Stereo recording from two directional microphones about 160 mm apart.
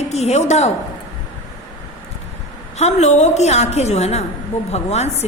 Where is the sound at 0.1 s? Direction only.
45° left (ahead or behind).